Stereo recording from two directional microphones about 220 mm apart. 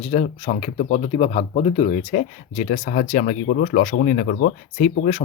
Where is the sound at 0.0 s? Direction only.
25° left (ahead or behind).